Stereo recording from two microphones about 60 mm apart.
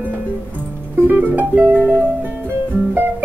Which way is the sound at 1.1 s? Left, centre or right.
Right.